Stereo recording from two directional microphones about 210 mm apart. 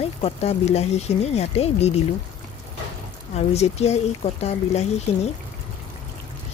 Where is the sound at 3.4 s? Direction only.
30° left (ahead or behind).